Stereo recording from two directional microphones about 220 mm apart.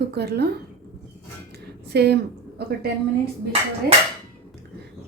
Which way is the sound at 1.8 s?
50° right (ahead or behind).